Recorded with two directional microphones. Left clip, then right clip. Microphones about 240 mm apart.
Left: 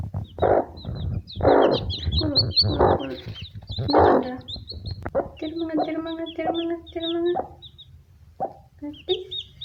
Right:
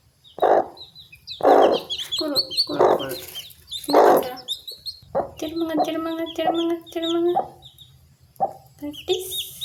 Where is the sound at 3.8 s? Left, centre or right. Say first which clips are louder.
Right 2 dB; centre.